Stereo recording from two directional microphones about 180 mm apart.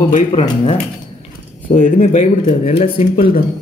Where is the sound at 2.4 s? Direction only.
35° left (ahead or behind).